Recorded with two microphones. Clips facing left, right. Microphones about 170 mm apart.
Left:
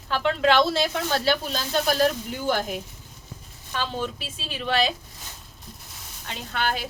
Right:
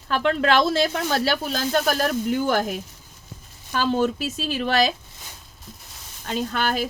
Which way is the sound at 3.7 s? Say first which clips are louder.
Right 8 dB; 45° right (ahead or behind).